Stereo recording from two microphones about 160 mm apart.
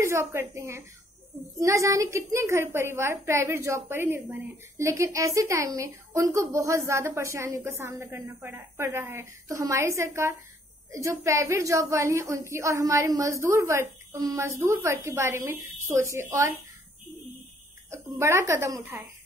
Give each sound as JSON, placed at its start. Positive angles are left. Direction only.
{"t": 0.0, "sound": "a woman's voice", "side_deg": -15}
{"t": 17.8, "sound": "a woman's voice", "side_deg": -15}